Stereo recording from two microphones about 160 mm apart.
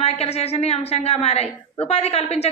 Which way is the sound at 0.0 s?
40° left (ahead or behind).